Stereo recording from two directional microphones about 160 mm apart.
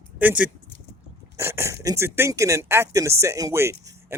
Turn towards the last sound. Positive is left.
turn(degrees=-15)  # may be behind; listen again after turning